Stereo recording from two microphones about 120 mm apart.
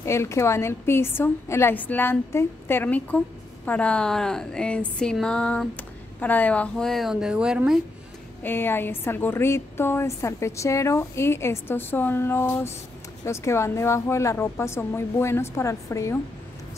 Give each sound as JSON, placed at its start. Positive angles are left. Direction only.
{"t": 0.0, "sound": "a woman's voice", "side_deg": 25}
{"t": 8.4, "sound": "a woman's voice", "side_deg": 20}